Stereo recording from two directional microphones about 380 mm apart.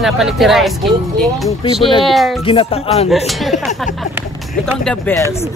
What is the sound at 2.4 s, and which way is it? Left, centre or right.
Speech, centre.